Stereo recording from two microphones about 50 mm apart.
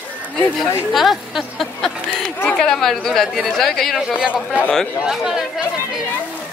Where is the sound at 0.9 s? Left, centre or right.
Centre.